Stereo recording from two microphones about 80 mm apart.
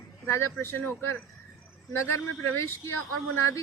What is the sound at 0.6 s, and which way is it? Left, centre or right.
A woman's voice, left.